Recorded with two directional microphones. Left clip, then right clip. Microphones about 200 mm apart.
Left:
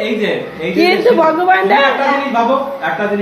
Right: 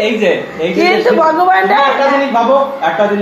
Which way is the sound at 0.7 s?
15° left (ahead or behind).